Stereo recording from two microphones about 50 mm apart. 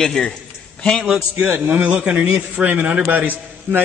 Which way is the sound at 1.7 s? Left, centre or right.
Right.